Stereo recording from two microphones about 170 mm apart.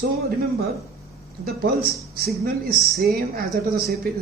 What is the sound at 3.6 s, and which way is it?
Speech, 75° right (ahead or behind).